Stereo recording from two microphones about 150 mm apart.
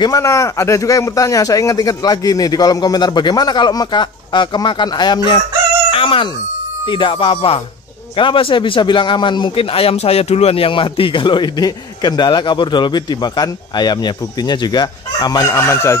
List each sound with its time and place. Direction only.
0.0 s a man's voice: 20° left (ahead or behind)